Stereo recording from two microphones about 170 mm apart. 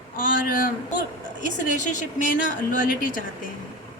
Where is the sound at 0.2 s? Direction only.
55° left (ahead or behind).